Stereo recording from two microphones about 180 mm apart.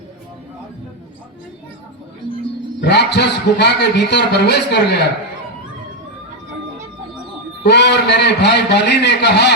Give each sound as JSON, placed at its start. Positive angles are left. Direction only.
{"t": 2.8, "sound": "a man's voice", "side_deg": 70}
{"t": 7.6, "sound": "a man's voice", "side_deg": 70}